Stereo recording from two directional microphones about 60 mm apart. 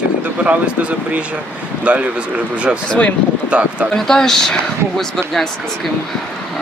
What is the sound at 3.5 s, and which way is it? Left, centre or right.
Speech, right.